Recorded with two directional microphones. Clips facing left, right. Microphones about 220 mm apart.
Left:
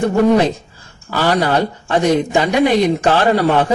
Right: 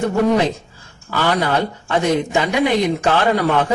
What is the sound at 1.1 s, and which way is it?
Speech, 35° left (ahead or behind).